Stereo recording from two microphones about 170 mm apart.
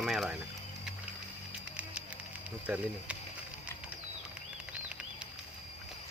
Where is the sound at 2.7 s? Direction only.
5° right (ahead or behind).